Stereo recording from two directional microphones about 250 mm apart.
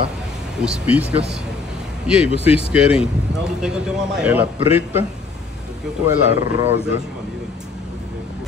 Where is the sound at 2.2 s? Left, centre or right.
Left.